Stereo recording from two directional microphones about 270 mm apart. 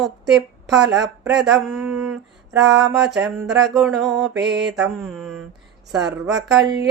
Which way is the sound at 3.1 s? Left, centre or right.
Centre.